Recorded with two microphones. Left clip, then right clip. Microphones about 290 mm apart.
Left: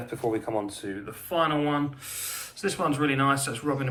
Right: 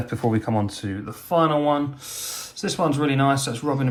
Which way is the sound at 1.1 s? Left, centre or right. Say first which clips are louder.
Right 6 dB; centre.